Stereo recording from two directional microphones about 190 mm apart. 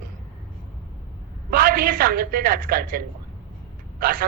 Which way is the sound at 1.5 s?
50° right (ahead or behind).